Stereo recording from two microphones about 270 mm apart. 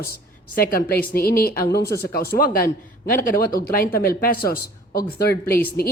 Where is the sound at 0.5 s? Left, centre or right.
Left.